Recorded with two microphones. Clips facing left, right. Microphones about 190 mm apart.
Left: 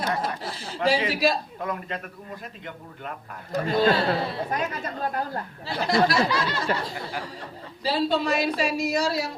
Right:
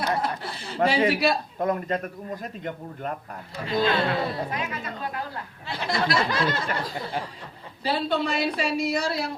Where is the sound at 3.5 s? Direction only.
45° left (ahead or behind).